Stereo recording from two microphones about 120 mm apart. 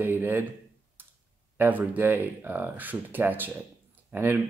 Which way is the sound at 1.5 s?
15° right (ahead or behind).